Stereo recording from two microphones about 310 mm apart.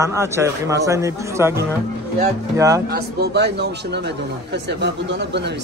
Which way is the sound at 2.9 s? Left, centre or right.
Right.